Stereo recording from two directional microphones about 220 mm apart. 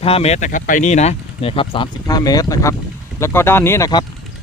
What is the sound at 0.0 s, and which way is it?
Speech, 25° left (ahead or behind).